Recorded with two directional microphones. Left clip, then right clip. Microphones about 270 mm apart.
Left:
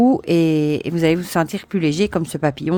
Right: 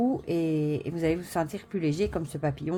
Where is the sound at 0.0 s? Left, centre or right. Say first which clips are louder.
Left 12 dB; left.